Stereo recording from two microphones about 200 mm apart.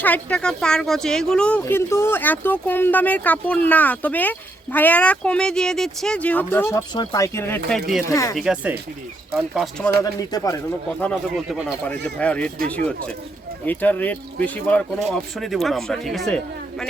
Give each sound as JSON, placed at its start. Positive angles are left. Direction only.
{"t": 0.0, "sound": "speech", "side_deg": 5}
{"t": 8.4, "sound": "a man's voice", "side_deg": 0}
{"t": 10.0, "sound": "speech", "side_deg": 15}
{"t": 11.0, "sound": "a man's voice", "side_deg": 0}
{"t": 13.7, "sound": "a man's voice", "side_deg": 10}